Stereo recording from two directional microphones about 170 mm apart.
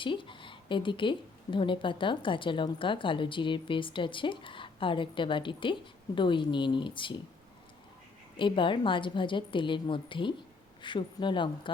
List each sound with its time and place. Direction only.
0.0 s a woman's voice: 30° left (ahead or behind)
8.4 s a woman's voice: 30° left (ahead or behind)